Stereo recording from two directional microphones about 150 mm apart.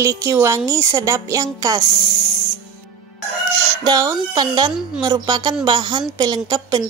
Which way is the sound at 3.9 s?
25° right (ahead or behind).